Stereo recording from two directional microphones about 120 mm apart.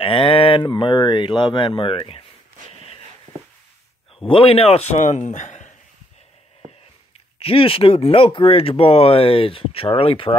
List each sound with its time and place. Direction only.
0.0 s speech: 50° left (ahead or behind)
4.3 s a man's voice: 50° left (ahead or behind); by 5.7 s 90° left
7.4 s speech: 50° left (ahead or behind)